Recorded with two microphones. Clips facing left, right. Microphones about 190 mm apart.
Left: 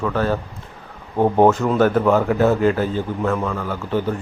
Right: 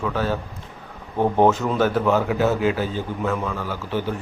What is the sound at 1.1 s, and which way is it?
Speech, 15° left (ahead or behind).